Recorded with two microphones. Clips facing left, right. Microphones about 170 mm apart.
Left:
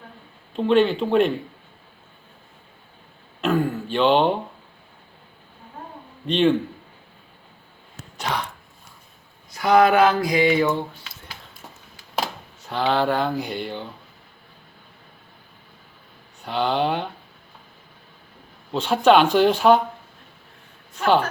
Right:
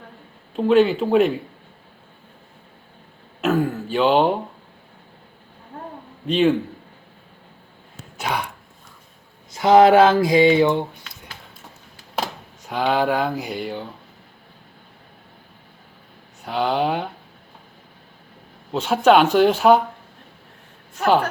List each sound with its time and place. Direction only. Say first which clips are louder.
0.5 s speech: right 2 dB; 5° right (ahead or behind)
3.4 s throat clearing: right 1 dB; centre (ahead or behind)
6.2 s a man's voice: right 1 dB; 5° right (ahead or behind)
8.2 s speech: right 2 dB; 10° right (ahead or behind)
9.5 s a sound: right 4 dB; 25° right (ahead or behind)
12.6 s speech: right 1 dB; 10° right (ahead or behind)
16.5 s speech: right 1 dB; 5° right (ahead or behind)
18.7 s speech: right 1 dB; 5° right (ahead or behind)